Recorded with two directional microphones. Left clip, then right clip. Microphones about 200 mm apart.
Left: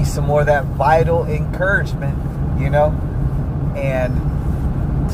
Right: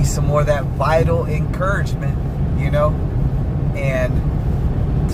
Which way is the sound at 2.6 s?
Centre (ahead or behind).